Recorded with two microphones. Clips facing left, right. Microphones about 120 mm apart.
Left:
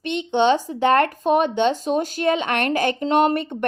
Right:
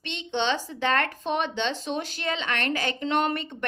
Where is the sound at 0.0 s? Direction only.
50° left (ahead or behind).